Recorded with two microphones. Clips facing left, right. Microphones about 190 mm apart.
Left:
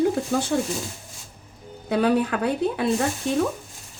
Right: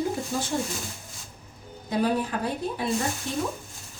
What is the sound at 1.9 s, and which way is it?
Speech, 70° left (ahead or behind).